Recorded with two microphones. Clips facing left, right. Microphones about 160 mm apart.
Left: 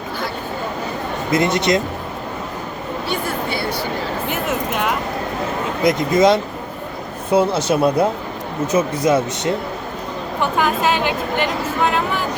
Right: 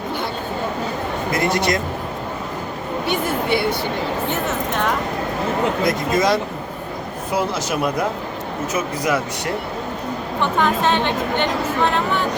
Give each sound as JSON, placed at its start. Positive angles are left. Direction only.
{"t": 1.3, "sound": "speech", "side_deg": 20}
{"t": 3.1, "sound": "a woman's voice", "side_deg": -20}
{"t": 4.7, "sound": "speech", "side_deg": 5}
{"t": 5.8, "sound": "speech", "side_deg": 20}
{"t": 10.6, "sound": "speech", "side_deg": 5}